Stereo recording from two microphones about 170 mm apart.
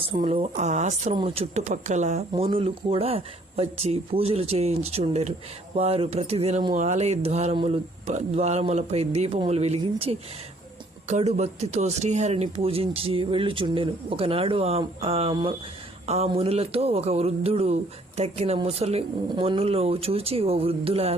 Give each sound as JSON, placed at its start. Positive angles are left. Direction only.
{"t": 0.1, "sound": "speech", "side_deg": -30}
{"t": 0.5, "sound": "speech", "side_deg": -45}
{"t": 1.1, "sound": "speech", "side_deg": -35}